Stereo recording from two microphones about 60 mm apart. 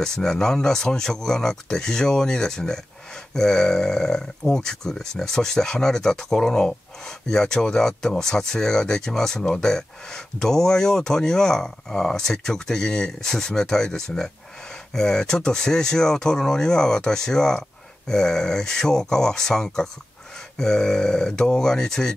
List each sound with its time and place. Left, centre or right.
0.0 s speech: centre